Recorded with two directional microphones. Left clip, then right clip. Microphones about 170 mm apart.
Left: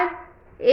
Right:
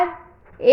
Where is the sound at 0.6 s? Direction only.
30° right (ahead or behind).